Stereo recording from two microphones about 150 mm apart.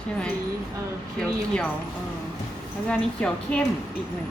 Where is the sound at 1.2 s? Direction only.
5° left (ahead or behind).